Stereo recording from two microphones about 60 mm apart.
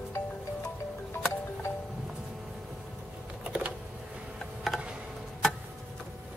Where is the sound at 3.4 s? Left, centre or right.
Centre.